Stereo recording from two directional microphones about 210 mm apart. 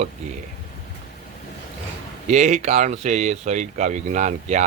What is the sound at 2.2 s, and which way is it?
Speech, 35° right (ahead or behind).